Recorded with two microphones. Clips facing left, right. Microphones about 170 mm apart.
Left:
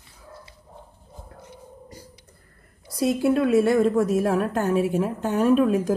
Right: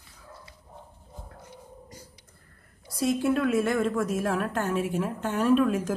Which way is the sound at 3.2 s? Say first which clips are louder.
Left 7 dB; 35° left (ahead or behind).